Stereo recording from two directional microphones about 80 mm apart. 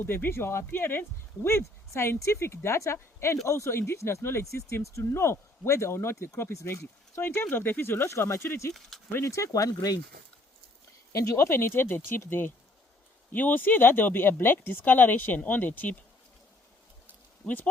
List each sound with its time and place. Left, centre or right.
0.0 s speech: left
11.1 s speech: left
17.4 s speech: left